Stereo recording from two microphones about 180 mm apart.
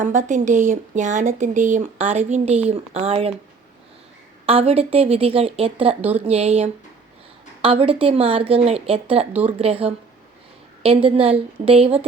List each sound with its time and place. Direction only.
0.0 s speech: 45° right (ahead or behind)
4.4 s speech: 35° right (ahead or behind)
5.9 s speech: 10° right (ahead or behind)
6.2 s speech: 35° right (ahead or behind)